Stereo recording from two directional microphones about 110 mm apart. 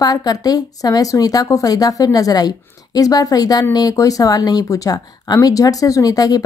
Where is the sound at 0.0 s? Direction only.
35° left (ahead or behind).